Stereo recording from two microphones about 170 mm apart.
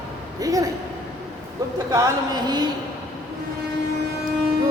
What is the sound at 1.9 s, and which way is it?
Speech, 20° right (ahead or behind).